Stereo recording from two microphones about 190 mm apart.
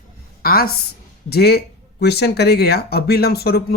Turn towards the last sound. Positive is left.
turn(degrees=55)  # may be behind; listen again after turning